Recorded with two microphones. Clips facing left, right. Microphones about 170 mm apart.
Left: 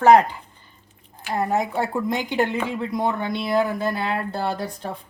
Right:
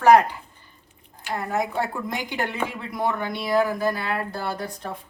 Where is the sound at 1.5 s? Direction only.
20° left (ahead or behind).